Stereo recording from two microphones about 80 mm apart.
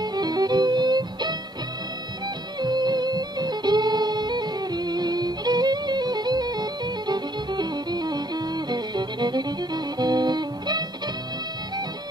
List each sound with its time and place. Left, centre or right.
0.0 s music: right
2.6 s music: right